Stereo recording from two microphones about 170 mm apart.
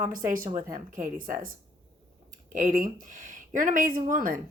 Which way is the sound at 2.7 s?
50° right (ahead or behind).